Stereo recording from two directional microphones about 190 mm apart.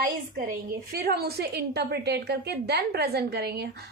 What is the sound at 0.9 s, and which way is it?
A woman's voice, 55° right (ahead or behind).